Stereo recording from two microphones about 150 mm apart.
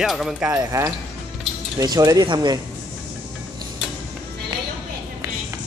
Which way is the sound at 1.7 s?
25° right (ahead or behind).